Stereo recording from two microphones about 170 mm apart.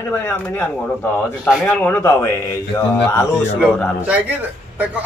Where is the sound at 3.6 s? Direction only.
5° right (ahead or behind).